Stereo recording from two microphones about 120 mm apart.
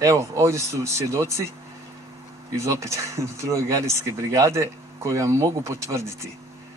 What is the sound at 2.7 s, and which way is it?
Speech, 25° right (ahead or behind).